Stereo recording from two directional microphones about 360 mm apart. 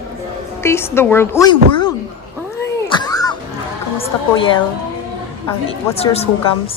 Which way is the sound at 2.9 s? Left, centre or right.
Centre.